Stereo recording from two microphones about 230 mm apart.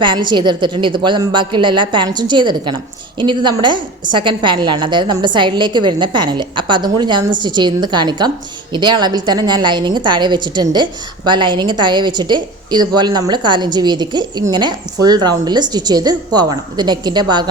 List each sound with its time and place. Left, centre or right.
0.0 s a woman's voice: centre